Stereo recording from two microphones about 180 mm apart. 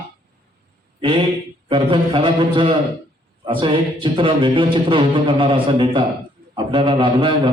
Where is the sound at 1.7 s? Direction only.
30° right (ahead or behind).